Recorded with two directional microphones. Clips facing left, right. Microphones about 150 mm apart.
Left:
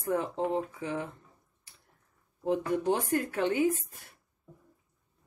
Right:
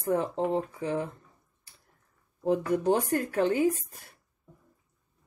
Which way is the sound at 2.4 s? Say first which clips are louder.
Right 3 dB; 40° right (ahead or behind).